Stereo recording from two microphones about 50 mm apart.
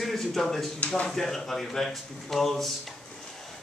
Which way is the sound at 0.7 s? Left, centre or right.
Left.